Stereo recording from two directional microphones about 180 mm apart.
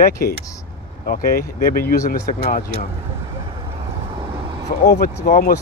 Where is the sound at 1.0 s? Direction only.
50° left (ahead or behind).